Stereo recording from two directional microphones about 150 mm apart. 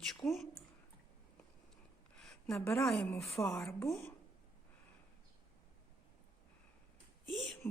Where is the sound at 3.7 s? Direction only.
15° left (ahead or behind).